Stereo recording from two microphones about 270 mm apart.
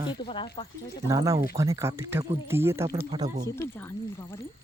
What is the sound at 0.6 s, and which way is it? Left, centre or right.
Speech, centre.